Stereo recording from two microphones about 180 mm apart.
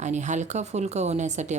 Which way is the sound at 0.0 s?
40° right (ahead or behind).